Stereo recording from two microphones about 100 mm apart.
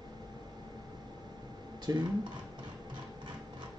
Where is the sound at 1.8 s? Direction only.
45° right (ahead or behind).